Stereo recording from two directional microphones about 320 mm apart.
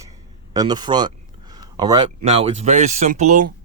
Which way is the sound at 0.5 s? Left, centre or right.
Centre.